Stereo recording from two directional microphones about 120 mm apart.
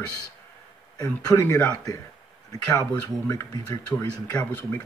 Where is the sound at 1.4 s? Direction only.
15° left (ahead or behind).